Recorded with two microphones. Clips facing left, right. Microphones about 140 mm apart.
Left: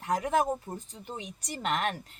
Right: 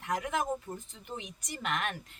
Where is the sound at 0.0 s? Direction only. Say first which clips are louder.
Left 5 dB; 35° left (ahead or behind).